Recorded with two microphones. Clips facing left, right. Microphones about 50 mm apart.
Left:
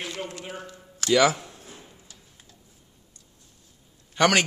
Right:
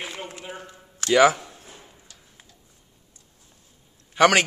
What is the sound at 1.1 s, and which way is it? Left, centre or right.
Speech, centre.